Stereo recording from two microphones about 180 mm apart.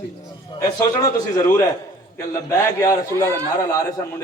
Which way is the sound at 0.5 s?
30° left (ahead or behind).